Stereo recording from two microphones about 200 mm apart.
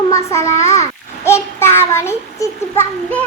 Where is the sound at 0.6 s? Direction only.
15° left (ahead or behind).